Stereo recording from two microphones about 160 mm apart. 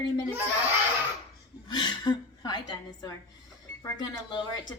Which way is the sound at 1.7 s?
25° left (ahead or behind).